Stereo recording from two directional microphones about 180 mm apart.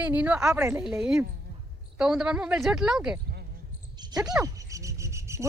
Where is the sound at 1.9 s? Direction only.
5° right (ahead or behind).